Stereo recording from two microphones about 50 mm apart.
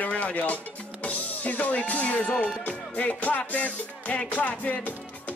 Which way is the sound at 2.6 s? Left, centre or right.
Left.